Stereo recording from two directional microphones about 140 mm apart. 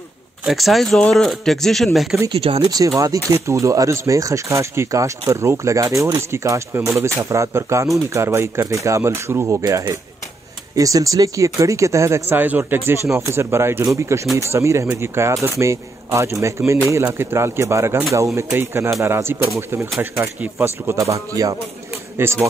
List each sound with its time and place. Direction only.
0.5 s speech: centre (ahead or behind)
2.3 s speech: 45° right (ahead or behind)
2.6 s a man's voice: 25° right (ahead or behind)